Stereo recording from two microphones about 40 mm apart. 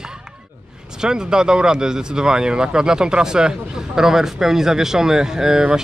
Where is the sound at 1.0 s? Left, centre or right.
Centre.